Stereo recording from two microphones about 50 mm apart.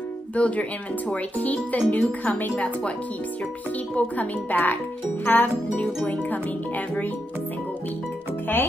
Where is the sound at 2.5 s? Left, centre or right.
Left.